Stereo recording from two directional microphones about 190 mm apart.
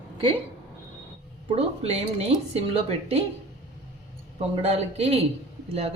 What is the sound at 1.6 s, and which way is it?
A woman's voice, 35° right (ahead or behind).